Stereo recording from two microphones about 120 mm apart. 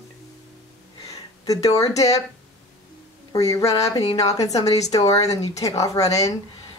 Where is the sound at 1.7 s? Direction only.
30° left (ahead or behind).